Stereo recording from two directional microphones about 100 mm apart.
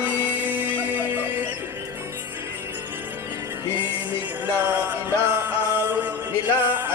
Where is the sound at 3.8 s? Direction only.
15° right (ahead or behind).